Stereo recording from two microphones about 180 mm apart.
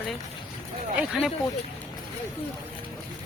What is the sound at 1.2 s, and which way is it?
Speech, 5° right (ahead or behind).